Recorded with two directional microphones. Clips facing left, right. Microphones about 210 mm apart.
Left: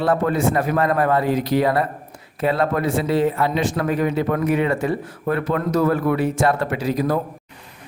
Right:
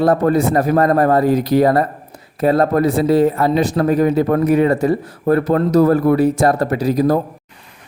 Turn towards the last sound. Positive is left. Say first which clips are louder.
# right 6 dB
turn(degrees=-40)  # may be behind; listen again after turning